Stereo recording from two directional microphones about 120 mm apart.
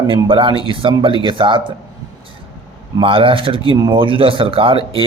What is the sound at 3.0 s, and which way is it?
Speech, 45° right (ahead or behind).